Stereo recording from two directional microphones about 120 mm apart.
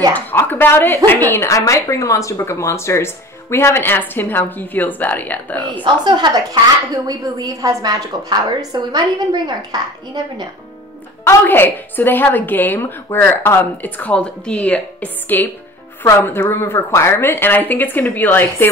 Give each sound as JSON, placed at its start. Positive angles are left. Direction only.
{"t": 0.1, "sound": "a woman's voice", "side_deg": 15}
{"t": 6.0, "sound": "a woman's voice", "side_deg": -35}
{"t": 11.2, "sound": "a woman's voice", "side_deg": 15}